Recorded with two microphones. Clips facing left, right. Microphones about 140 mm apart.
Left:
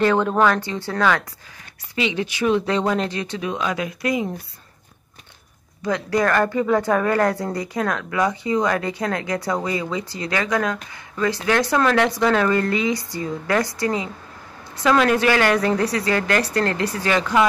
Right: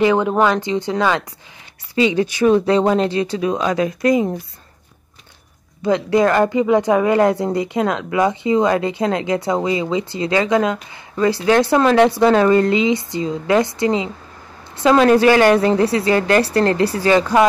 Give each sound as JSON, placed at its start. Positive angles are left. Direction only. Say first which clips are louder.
{"t": 0.0, "sound": "speech", "louder": "right 2 dB", "side_deg": -15}
{"t": 2.0, "sound": "speech", "louder": "right 7 dB", "side_deg": -40}
{"t": 5.8, "sound": "speech", "louder": "right 6 dB", "side_deg": -25}